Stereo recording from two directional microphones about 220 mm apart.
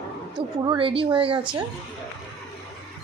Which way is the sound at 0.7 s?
25° right (ahead or behind).